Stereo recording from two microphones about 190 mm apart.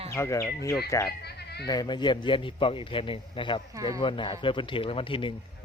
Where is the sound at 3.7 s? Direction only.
20° right (ahead or behind).